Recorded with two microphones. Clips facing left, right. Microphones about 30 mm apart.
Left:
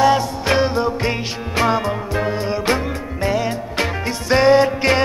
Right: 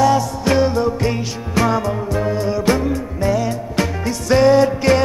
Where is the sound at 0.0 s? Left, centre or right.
Left.